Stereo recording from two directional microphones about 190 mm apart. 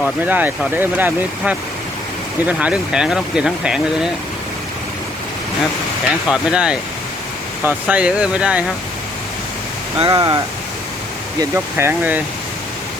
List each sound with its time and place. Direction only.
0.3 s speech: 10° right (ahead or behind)
6.2 s speech: 5° right (ahead or behind)
10.1 s speech: 20° right (ahead or behind)